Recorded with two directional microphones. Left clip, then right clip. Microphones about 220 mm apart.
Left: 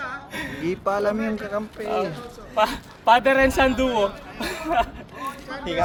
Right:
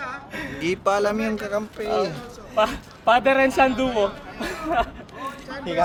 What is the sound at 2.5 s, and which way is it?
Speech, 25° left (ahead or behind).